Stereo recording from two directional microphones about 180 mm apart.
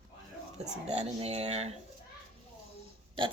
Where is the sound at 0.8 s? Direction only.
35° right (ahead or behind).